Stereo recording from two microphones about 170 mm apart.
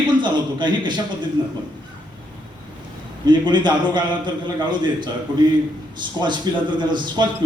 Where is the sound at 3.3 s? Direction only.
25° right (ahead or behind).